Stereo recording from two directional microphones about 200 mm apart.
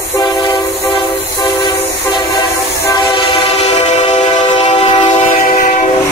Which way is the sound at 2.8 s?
25° left (ahead or behind).